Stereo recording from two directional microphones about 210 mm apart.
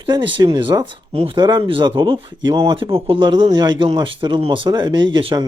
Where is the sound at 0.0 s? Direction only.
25° right (ahead or behind).